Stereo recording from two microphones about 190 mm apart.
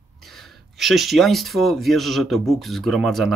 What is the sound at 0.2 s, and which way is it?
Speech, centre (ahead or behind).